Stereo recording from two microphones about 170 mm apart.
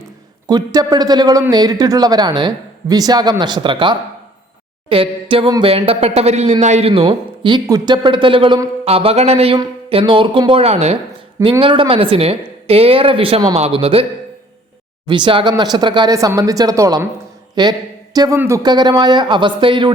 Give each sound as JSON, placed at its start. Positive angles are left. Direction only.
{"t": 0.4, "sound": "a man's voice", "side_deg": -25}
{"t": 8.8, "sound": "a man's voice", "side_deg": -35}